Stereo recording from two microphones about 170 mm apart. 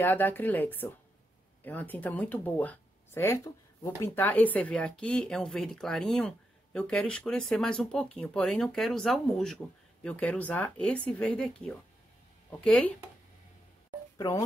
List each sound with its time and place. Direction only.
0.0 s speech: 10° left (ahead or behind)
14.1 s speech: 20° left (ahead or behind)